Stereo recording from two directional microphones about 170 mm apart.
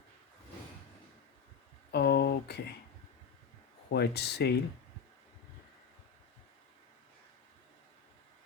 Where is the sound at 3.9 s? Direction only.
70° left (ahead or behind).